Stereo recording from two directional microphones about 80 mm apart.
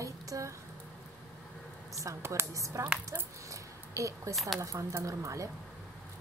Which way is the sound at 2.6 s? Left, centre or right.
Right.